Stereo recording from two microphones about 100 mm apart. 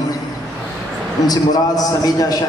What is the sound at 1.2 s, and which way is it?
A man's voice, 40° left (ahead or behind).